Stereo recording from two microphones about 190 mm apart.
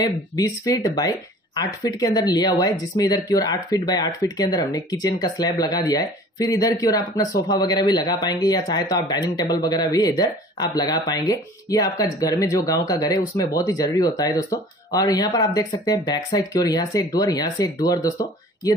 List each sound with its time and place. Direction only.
0.0 s speech: 20° left (ahead or behind)